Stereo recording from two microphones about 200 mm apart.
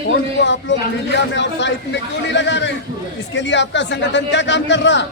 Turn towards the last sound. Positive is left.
turn(degrees=65)  # may be behind; listen again after turning